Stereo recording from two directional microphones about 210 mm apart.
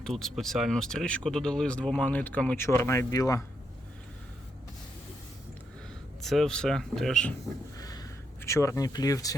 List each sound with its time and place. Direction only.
0.0 s speech: centre (ahead or behind)
6.2 s speech: centre (ahead or behind)
7.8 s a sound: 15° left (ahead or behind)